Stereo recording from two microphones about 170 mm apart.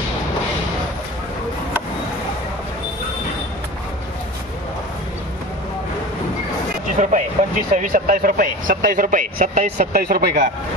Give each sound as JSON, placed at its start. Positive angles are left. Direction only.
{"t": 7.0, "sound": "speech", "side_deg": -45}